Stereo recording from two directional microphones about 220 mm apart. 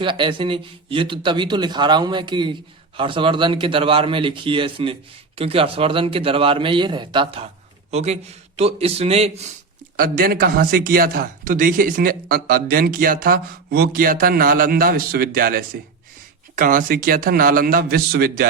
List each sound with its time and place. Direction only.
0.0 s speech: 20° right (ahead or behind)
10.0 s a man's voice: 40° right (ahead or behind)